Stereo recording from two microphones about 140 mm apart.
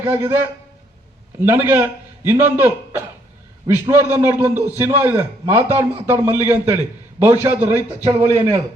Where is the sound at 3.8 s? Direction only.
20° right (ahead or behind).